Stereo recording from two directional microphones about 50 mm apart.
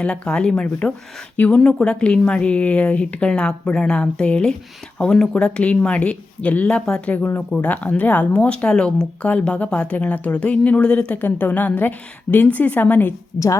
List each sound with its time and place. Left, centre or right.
0.0 s a woman's voice: centre
11.1 s a woman's voice: left